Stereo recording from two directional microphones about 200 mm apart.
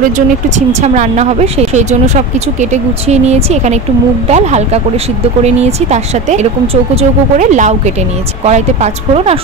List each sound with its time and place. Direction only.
0.6 s speech: 35° right (ahead or behind)